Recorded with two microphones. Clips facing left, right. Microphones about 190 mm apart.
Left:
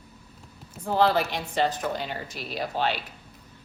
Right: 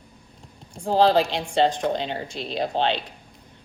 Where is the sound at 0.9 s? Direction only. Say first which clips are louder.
Right 4 dB; 30° right (ahead or behind).